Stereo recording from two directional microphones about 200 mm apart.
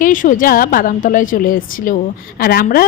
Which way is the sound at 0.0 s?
40° left (ahead or behind).